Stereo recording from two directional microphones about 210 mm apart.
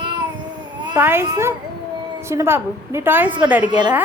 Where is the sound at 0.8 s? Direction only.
15° right (ahead or behind).